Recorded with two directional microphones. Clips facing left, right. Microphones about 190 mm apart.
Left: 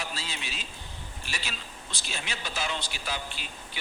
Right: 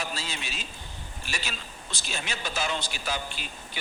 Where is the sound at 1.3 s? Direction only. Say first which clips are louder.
Right 3 dB; 45° right (ahead or behind).